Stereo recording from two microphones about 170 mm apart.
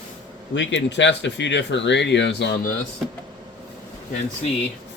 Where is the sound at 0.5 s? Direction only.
90° left.